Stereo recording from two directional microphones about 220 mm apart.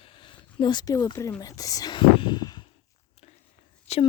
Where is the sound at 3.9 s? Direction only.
30° left (ahead or behind).